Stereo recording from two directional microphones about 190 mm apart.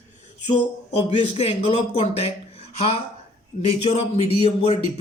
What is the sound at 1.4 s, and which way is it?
A man's voice, 35° left (ahead or behind).